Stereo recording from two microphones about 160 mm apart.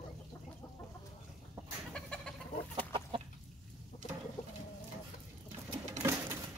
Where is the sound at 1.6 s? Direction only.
20° right (ahead or behind).